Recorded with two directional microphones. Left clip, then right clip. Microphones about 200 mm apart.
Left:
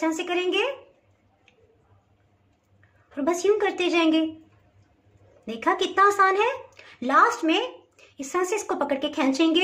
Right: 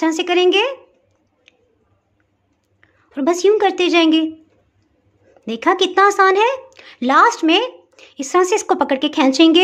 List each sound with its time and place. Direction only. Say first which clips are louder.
0.0 s speech: right 10 dB; 50° right (ahead or behind)
3.2 s a woman's voice: right 8 dB; 55° right (ahead or behind)
5.4 s speech: right 8 dB; 55° right (ahead or behind)